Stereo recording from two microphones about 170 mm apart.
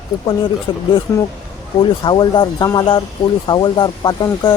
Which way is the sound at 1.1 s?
20° left (ahead or behind).